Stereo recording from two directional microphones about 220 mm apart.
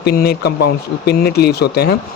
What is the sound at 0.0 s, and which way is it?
A man's voice, 45° left (ahead or behind).